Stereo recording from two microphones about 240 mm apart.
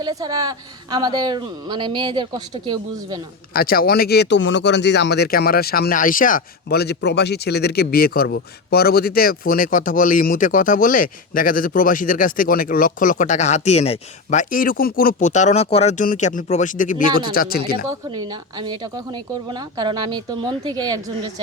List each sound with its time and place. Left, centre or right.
0.0 s a woman's voice: centre
3.5 s speech: left
17.8 s a woman's voice: centre